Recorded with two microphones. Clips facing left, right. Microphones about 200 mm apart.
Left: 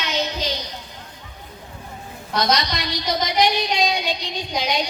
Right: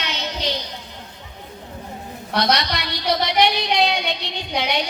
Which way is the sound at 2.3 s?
65° right (ahead or behind).